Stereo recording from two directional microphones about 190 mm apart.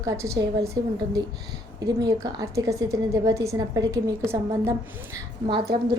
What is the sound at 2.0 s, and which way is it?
A woman's voice, 20° right (ahead or behind).